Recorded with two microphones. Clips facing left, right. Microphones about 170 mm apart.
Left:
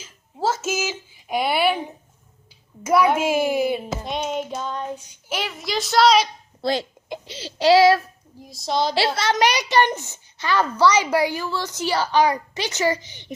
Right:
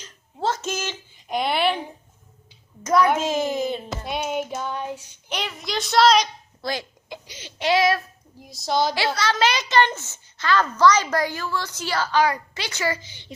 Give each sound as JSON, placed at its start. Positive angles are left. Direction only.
{"t": 0.0, "sound": "a child's voice", "side_deg": 5}
{"t": 4.0, "sound": "child singing", "side_deg": -5}
{"t": 5.3, "sound": "speech", "side_deg": 0}
{"t": 6.6, "sound": "a child's voice", "side_deg": 25}
{"t": 8.4, "sound": "speech", "side_deg": 0}
{"t": 9.0, "sound": "a child's voice", "side_deg": 25}